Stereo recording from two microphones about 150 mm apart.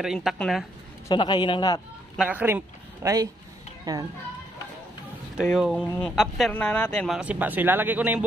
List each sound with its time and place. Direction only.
0.0 s speech: 5° right (ahead or behind)
1.0 s a man's voice: 30° left (ahead or behind)
2.1 s a man's voice: 10° right (ahead or behind)
5.4 s speech: centre (ahead or behind)
7.2 s speech: 10° right (ahead or behind)